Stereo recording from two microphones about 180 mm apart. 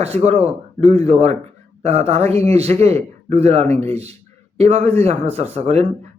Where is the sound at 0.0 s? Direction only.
35° right (ahead or behind).